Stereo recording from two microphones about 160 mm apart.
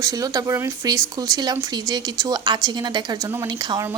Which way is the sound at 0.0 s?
20° right (ahead or behind).